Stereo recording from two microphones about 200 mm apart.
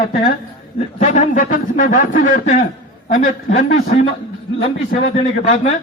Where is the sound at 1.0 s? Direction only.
35° left (ahead or behind).